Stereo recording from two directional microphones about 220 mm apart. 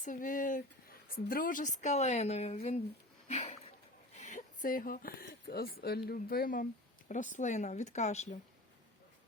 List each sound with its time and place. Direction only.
0.0 s speech: 35° left (ahead or behind)
3.2 s a sound: 30° left (ahead or behind)
4.1 s speech: 30° left (ahead or behind)